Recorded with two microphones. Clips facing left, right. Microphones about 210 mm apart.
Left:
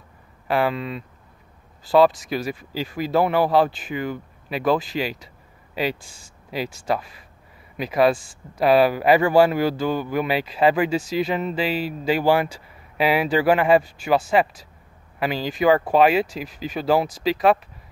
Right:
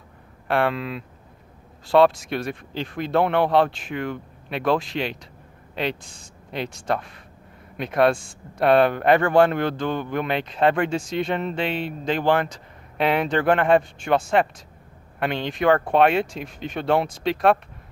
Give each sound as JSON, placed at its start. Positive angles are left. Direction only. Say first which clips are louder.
{"t": 0.5, "sound": "a man's voice", "louder": "even", "side_deg": 0}